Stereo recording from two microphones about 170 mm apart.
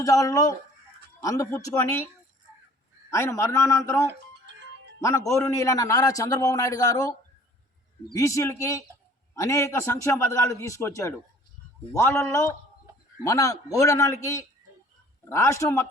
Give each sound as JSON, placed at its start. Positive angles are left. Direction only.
{"t": 0.0, "sound": "a man's voice", "side_deg": 20}
{"t": 3.1, "sound": "a man's voice", "side_deg": 15}
{"t": 8.1, "sound": "a man's voice", "side_deg": 20}